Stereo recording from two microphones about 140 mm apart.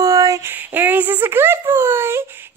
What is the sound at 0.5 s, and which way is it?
Speech, 15° right (ahead or behind).